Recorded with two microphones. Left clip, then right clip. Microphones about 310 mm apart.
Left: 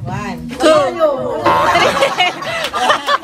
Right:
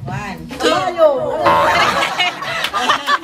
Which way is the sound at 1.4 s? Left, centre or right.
Centre.